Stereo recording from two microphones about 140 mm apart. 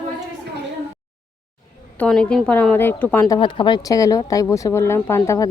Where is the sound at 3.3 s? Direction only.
35° left (ahead or behind).